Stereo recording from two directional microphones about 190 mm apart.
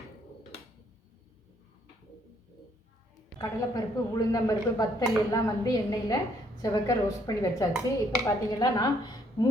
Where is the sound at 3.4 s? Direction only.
20° left (ahead or behind).